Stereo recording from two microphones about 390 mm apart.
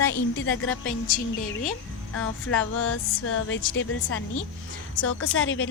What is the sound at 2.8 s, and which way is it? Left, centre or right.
A woman's voice, left.